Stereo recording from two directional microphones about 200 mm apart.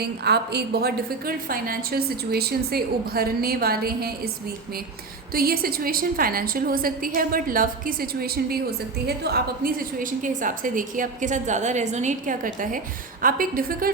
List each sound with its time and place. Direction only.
0.0 s a woman's voice: 55° right (ahead or behind)